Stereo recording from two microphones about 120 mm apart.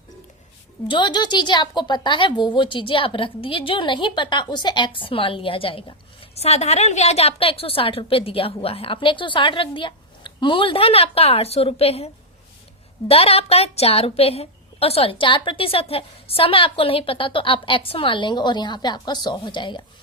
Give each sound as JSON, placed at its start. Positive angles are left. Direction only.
{"t": 0.9, "sound": "a woman's voice", "side_deg": 40}
{"t": 6.3, "sound": "a woman's voice", "side_deg": 60}